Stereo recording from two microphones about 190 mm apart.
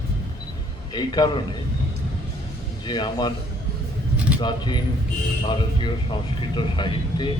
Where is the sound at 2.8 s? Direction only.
20° left (ahead or behind).